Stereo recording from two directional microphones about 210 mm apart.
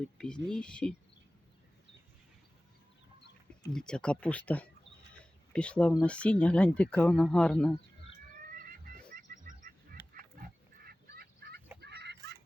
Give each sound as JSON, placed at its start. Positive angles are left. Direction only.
{"t": 0.2, "sound": "speech", "side_deg": 5}
{"t": 3.7, "sound": "speech", "side_deg": 5}
{"t": 8.5, "sound": "a sound", "side_deg": -40}
{"t": 9.6, "sound": "fowl", "side_deg": -40}
{"t": 11.8, "sound": "chicken", "side_deg": -55}